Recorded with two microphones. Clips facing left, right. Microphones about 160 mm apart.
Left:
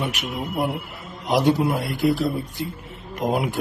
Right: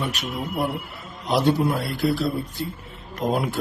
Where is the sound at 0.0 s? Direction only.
15° left (ahead or behind).